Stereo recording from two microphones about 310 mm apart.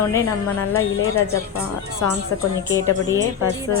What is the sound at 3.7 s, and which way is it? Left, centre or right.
Speech, left.